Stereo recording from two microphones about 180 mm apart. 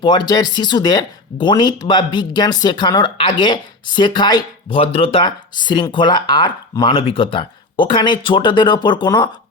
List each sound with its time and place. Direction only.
0.0 s speech: 25° left (ahead or behind)